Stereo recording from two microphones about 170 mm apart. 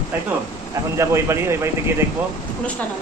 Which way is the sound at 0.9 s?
15° right (ahead or behind).